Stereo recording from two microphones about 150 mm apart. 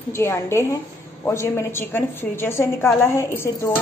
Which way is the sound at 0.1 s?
15° left (ahead or behind).